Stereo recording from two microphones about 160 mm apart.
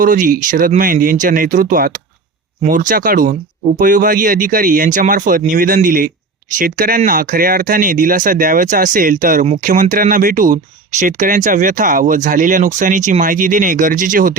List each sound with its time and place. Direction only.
0.0 s speech: 55° right (ahead or behind)